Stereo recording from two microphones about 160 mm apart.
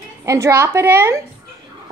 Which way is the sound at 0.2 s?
15° right (ahead or behind).